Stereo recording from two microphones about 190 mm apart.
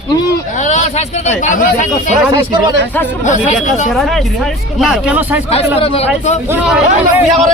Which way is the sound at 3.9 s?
Centre (ahead or behind).